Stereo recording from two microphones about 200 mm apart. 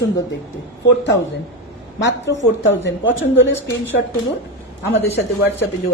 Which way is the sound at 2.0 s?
65° left (ahead or behind).